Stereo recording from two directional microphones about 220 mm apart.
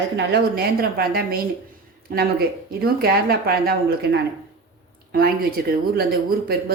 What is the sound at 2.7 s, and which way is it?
A woman's voice, 45° right (ahead or behind).